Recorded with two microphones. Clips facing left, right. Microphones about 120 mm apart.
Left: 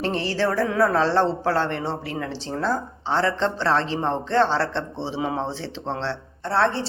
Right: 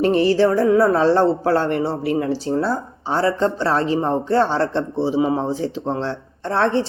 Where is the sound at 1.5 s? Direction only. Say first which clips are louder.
Right 5 dB; 40° right (ahead or behind).